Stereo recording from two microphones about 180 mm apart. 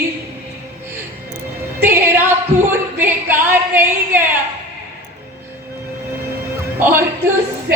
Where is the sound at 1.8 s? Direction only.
10° right (ahead or behind).